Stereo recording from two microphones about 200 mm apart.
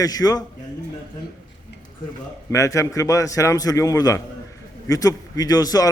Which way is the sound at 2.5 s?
15° left (ahead or behind).